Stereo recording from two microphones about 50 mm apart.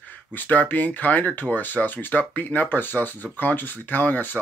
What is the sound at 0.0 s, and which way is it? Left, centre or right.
Speech, left.